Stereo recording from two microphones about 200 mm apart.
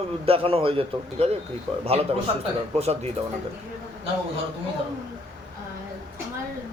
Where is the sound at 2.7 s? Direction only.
30° right (ahead or behind).